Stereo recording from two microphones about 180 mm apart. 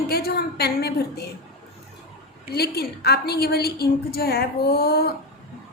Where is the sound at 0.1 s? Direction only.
60° left (ahead or behind).